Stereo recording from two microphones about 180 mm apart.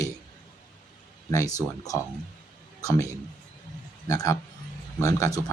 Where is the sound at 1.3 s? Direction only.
20° left (ahead or behind).